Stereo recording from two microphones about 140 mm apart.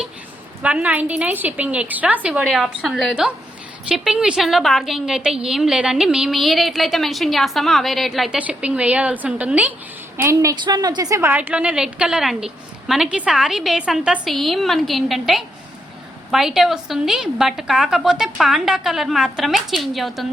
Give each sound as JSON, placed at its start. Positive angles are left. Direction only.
{"t": 0.6, "sound": "a woman's voice", "side_deg": -10}
{"t": 10.2, "sound": "a woman's voice", "side_deg": -20}
{"t": 10.5, "sound": "a woman's voice", "side_deg": -30}